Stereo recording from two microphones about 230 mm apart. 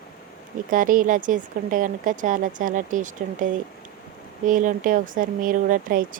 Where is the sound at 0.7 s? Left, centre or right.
Right.